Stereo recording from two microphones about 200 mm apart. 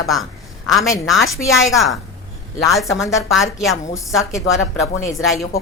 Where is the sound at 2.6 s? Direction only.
Centre (ahead or behind).